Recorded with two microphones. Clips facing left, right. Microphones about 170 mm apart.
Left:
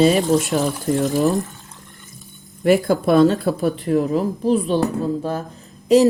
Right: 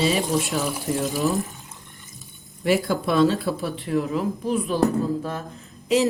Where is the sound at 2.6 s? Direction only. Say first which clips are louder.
Left 6 dB; 45° left (ahead or behind).